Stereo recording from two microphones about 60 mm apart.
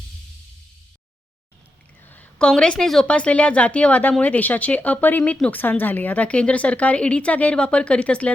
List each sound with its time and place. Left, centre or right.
2.4 s a woman's voice: centre
3.1 s a woman's voice: centre